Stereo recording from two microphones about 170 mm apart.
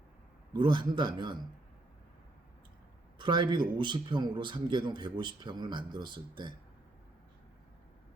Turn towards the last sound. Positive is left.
turn(degrees=-25)  # may be behind; listen again after turning